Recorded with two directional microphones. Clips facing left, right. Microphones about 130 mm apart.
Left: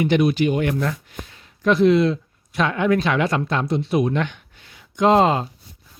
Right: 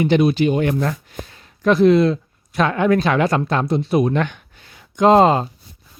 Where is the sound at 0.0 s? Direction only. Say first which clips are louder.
Right 2 dB; 30° right (ahead or behind).